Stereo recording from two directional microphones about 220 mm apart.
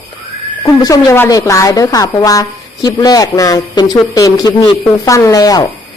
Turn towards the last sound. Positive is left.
turn(degrees=15)  # may be behind; listen again after turning